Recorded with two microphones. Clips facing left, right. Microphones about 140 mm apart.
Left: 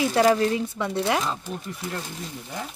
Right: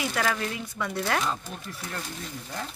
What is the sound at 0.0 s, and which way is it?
Speech, 30° left (ahead or behind).